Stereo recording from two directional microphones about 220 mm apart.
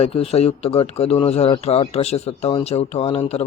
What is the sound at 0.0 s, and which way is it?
Speech, 25° left (ahead or behind).